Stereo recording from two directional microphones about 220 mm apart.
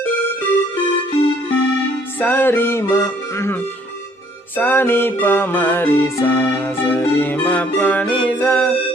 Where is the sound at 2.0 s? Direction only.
10° left (ahead or behind).